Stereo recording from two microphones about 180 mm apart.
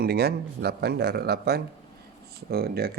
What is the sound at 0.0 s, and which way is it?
Speech, 60° right (ahead or behind).